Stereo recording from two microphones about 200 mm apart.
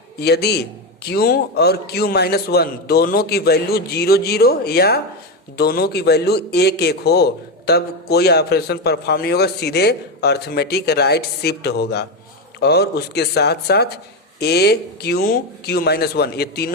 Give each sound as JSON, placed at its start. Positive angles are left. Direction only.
{"t": 0.2, "sound": "a man's voice", "side_deg": 55}